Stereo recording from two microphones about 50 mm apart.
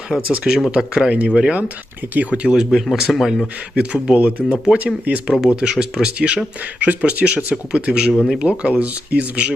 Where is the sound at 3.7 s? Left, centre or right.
Centre.